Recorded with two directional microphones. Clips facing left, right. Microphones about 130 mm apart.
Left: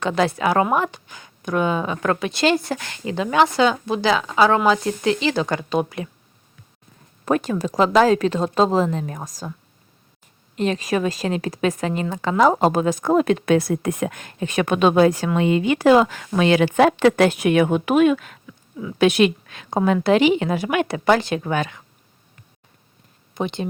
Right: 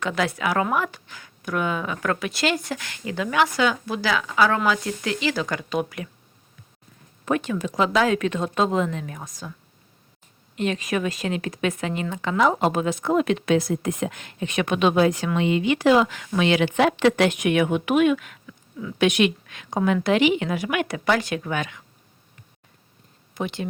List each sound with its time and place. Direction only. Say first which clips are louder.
0.0 s a woman's voice: left 5 dB; 30° left (ahead or behind)
7.3 s speech: left 3 dB; 40° left (ahead or behind)
10.5 s speech: left 3 dB; 35° left (ahead or behind)
23.3 s speech: left 3 dB; 25° left (ahead or behind)